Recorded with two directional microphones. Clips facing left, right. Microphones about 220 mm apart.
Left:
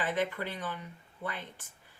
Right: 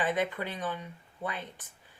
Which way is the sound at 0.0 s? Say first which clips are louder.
Right 2 dB; 15° right (ahead or behind).